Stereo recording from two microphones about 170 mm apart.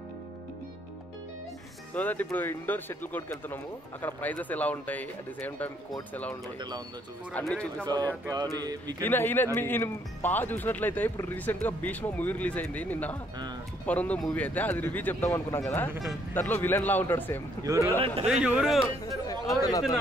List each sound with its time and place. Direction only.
2.0 s speech: 10° left (ahead or behind)
7.3 s speech: 5° left (ahead or behind)
8.3 s speech: 20° right (ahead or behind)
9.0 s speech: 10° left (ahead or behind)
17.6 s speech: 20° right (ahead or behind)
18.2 s speech: 5° right (ahead or behind)
19.0 s chatter: 20° left (ahead or behind)